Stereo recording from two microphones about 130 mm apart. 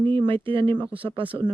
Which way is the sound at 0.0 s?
40° right (ahead or behind).